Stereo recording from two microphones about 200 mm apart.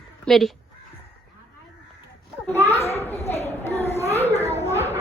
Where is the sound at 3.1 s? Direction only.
30° left (ahead or behind).